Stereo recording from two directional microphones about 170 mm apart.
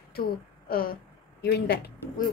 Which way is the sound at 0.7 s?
60° left (ahead or behind).